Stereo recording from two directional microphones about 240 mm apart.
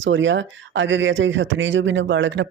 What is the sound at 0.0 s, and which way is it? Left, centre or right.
Speech, right.